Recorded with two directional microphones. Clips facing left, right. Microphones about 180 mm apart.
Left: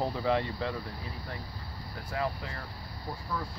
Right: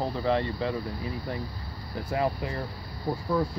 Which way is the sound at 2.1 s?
20° right (ahead or behind).